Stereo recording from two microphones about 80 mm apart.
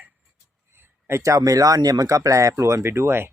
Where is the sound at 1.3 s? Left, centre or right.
Right.